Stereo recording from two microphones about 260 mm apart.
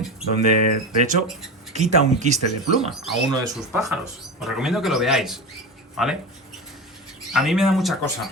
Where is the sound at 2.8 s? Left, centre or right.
Centre.